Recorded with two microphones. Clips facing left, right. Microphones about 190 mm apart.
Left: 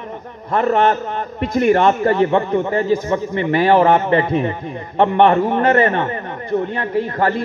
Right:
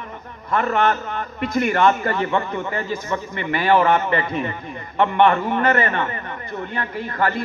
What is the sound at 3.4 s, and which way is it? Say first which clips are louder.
A man's voice: left 4 dB; 30° left (ahead or behind).